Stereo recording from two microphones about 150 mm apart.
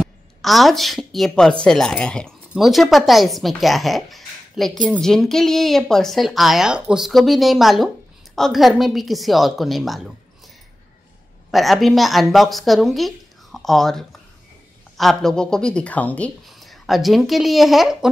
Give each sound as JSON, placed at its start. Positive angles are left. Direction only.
{"t": 0.0, "sound": "a woman's voice", "side_deg": 0}
{"t": 11.5, "sound": "a woman's voice", "side_deg": 0}